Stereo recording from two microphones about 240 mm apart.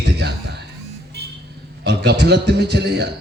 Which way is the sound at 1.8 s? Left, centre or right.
Right.